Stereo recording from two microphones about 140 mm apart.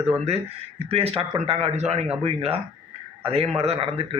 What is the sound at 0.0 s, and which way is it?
A man's voice, 50° right (ahead or behind).